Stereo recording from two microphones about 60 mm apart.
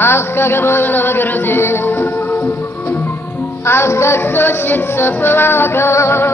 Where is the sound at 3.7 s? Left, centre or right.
Left.